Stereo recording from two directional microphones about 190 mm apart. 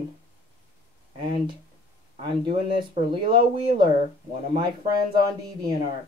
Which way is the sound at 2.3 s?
25° right (ahead or behind).